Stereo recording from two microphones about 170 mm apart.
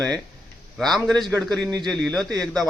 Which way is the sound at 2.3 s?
20° right (ahead or behind).